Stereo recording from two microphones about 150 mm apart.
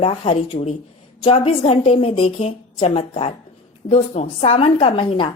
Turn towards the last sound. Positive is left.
turn(degrees=35)  # may be behind; listen again after turning